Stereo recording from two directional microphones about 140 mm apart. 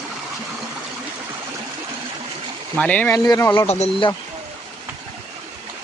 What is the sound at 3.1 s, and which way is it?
Speech, 25° left (ahead or behind).